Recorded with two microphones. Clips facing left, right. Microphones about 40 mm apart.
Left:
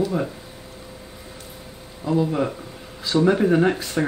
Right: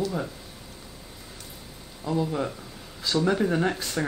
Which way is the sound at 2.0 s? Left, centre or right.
Centre.